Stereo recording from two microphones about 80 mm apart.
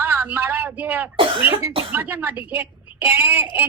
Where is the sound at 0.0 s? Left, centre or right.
Right.